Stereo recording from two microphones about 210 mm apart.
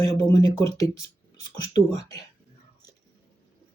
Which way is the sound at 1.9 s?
15° left (ahead or behind).